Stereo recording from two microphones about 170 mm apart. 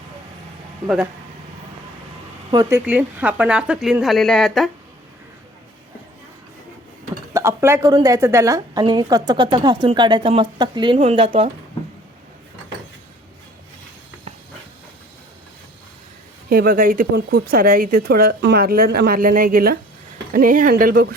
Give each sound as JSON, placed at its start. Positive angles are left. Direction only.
{"t": 2.5, "sound": "speech", "side_deg": -20}
{"t": 7.3, "sound": "a woman's voice", "side_deg": -15}
{"t": 16.5, "sound": "speech", "side_deg": -60}